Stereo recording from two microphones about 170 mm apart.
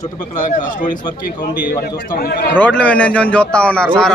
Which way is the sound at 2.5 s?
10° left (ahead or behind).